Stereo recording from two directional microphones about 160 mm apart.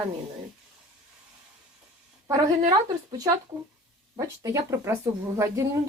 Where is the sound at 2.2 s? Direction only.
25° right (ahead or behind).